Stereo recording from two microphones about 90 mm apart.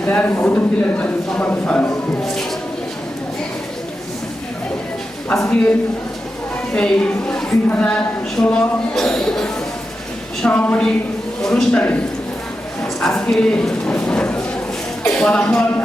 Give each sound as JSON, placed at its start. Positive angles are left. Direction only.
{"t": 0.0, "sound": "speech", "side_deg": 15}
{"t": 2.2, "sound": "speech", "side_deg": 5}
{"t": 5.3, "sound": "speech", "side_deg": 10}
{"t": 6.7, "sound": "speech", "side_deg": 10}
{"t": 13.0, "sound": "speech", "side_deg": 10}